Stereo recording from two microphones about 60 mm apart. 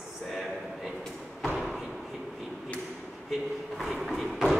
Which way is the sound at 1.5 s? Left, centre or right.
Centre.